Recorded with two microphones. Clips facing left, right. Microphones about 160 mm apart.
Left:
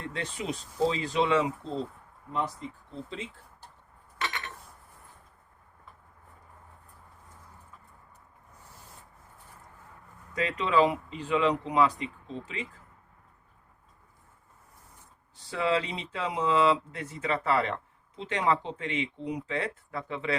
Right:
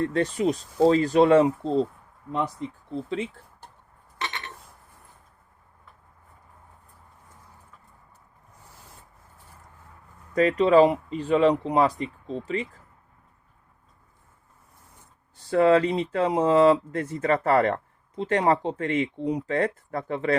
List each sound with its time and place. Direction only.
0.0 s speech: 45° right (ahead or behind)
2.9 s speech: 65° right (ahead or behind)
4.2 s a sound: 30° right (ahead or behind)
10.3 s speech: 45° right (ahead or behind)
15.4 s speech: 50° right (ahead or behind)